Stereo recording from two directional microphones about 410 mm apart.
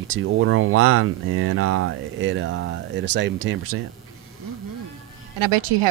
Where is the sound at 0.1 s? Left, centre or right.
Right.